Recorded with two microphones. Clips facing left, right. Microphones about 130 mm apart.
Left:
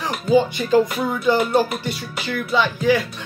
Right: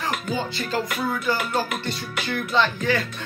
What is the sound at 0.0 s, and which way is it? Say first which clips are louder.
Speech: left 9 dB; 15° left (ahead or behind).